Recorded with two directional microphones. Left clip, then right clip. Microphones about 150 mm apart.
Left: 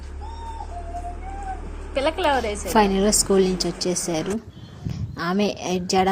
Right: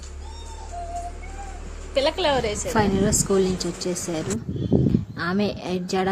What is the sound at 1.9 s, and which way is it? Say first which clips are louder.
Speech: even; 30° right (ahead or behind).